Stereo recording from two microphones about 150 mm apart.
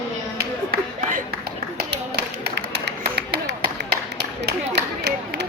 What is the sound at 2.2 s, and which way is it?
Music, 90° right.